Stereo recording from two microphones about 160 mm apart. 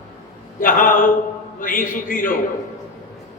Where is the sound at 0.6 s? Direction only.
60° left (ahead or behind).